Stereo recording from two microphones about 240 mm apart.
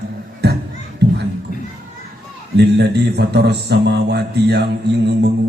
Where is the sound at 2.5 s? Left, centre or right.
Right.